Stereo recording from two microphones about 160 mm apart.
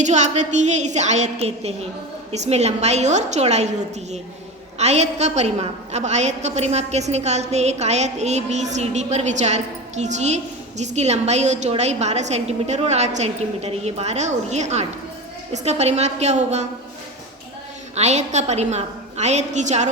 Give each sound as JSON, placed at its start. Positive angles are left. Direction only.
{"t": 0.0, "sound": "a woman's voice", "side_deg": -45}
{"t": 4.8, "sound": "a woman's voice", "side_deg": -45}
{"t": 17.9, "sound": "a woman's voice", "side_deg": -45}